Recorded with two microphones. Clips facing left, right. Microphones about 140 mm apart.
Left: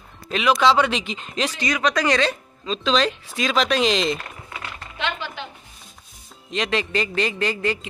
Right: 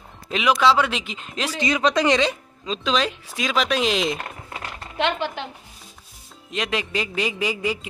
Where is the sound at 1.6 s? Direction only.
25° right (ahead or behind); by 4.1 s 5° right (ahead or behind).